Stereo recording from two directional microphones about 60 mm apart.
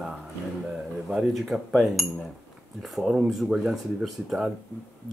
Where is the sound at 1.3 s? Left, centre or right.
Centre.